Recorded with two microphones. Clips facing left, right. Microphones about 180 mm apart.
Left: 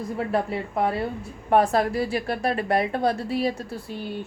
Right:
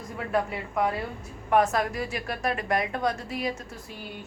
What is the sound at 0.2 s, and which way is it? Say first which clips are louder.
A woman's voice: left 2 dB; 30° left (ahead or behind).